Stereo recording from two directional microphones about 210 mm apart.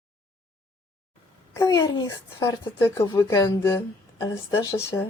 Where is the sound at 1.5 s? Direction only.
15° left (ahead or behind).